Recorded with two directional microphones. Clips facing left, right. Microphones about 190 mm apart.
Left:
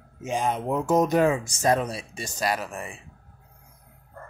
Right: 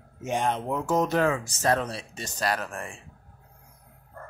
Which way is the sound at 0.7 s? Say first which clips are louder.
Left 5 dB; 20° left (ahead or behind).